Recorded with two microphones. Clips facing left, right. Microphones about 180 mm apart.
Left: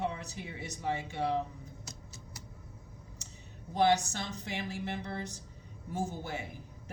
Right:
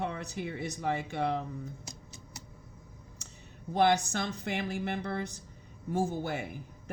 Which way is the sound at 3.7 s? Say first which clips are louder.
Right 1 dB; 60° right (ahead or behind).